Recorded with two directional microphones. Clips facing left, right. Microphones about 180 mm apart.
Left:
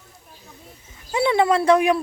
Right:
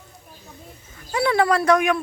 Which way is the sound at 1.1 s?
20° left (ahead or behind).